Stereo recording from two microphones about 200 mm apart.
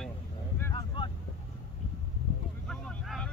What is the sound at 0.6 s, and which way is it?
Boat, 15° left (ahead or behind).